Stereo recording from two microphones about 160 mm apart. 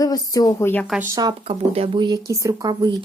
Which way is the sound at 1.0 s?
20° right (ahead or behind).